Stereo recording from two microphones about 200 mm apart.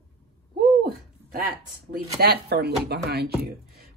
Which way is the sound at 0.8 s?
50° right (ahead or behind).